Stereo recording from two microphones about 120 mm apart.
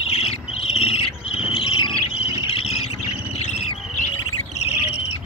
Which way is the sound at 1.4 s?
50° left (ahead or behind).